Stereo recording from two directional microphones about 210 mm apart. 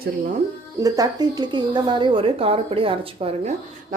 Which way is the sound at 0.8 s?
15° right (ahead or behind).